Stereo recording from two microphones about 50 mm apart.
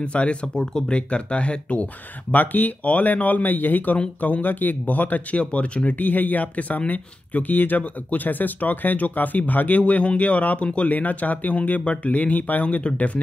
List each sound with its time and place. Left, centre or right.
0.0 s speech: left
2.3 s speech: left